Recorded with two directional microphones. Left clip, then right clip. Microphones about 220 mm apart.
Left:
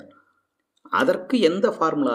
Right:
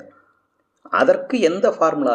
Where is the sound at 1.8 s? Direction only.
50° left (ahead or behind).